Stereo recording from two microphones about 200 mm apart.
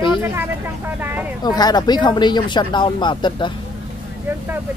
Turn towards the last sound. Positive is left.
turn(degrees=25)  # may be behind; listen again after turning